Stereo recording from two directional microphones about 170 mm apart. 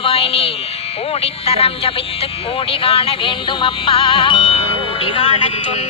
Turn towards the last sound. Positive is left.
turn(degrees=35)  # may be behind; listen again after turning